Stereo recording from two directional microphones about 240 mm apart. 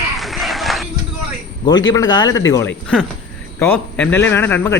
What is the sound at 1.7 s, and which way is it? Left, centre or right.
A man's voice, centre.